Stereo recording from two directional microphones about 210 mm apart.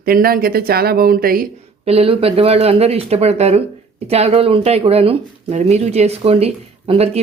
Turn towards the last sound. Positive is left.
turn(degrees=-30)  # may be behind; listen again after turning